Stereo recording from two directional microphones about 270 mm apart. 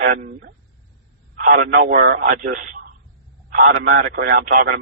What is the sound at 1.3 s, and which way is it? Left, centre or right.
A man's voice, right.